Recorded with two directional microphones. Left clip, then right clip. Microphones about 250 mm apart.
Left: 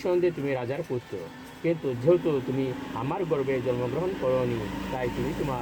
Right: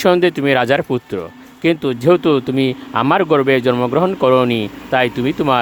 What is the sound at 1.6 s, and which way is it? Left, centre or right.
Mantra, right.